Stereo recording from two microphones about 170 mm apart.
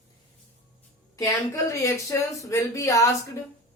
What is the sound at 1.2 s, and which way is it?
Speech, 20° left (ahead or behind).